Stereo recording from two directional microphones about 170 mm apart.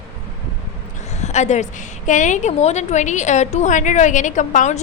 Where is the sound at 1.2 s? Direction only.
45° left (ahead or behind).